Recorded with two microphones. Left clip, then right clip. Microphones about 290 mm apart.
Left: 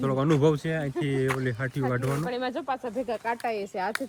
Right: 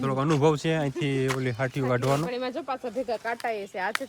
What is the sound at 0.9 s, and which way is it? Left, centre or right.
Speech, right.